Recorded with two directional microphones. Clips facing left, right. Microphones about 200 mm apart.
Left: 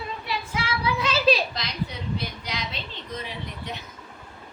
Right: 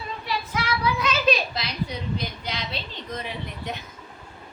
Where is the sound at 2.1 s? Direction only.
25° right (ahead or behind).